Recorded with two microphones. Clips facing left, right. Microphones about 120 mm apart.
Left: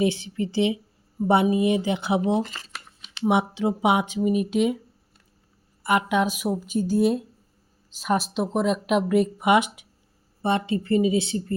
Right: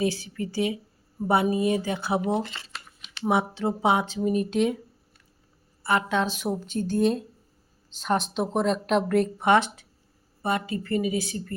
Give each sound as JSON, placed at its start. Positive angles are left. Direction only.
{"t": 0.0, "sound": "a woman's voice", "side_deg": 20}
{"t": 5.8, "sound": "speech", "side_deg": 15}
{"t": 10.4, "sound": "a woman's voice", "side_deg": 25}